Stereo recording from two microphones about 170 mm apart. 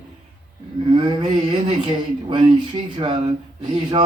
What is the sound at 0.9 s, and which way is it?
Speech, 30° right (ahead or behind).